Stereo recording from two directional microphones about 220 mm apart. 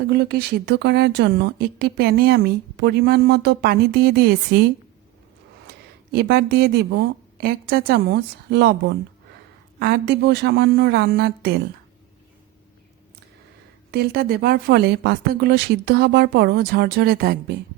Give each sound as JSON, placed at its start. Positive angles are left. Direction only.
{"t": 0.1, "sound": "speech", "side_deg": -45}
{"t": 5.6, "sound": "a woman's voice", "side_deg": -45}
{"t": 9.7, "sound": "speech", "side_deg": -50}
{"t": 13.9, "sound": "speech", "side_deg": -45}